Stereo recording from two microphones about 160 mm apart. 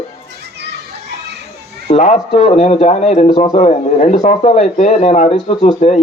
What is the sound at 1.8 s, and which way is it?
A man's voice, 45° left (ahead or behind).